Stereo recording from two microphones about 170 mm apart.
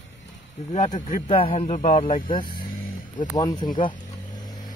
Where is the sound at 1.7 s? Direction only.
50° left (ahead or behind).